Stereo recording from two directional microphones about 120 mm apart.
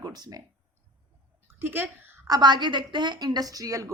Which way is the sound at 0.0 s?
35° right (ahead or behind).